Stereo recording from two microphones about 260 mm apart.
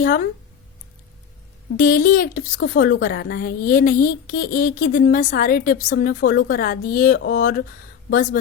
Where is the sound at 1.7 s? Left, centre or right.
Left.